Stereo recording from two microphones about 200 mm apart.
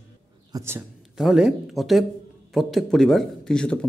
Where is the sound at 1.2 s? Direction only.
Centre (ahead or behind).